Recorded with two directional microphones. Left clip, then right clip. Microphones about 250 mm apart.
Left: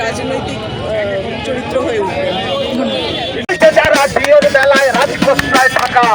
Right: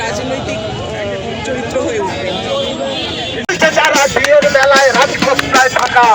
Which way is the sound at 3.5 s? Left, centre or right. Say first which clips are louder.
Left 2 dB; centre.